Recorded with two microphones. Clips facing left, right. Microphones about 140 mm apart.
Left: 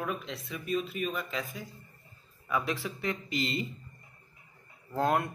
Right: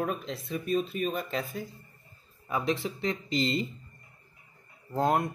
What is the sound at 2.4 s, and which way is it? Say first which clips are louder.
Speech: right 2 dB; 30° right (ahead or behind).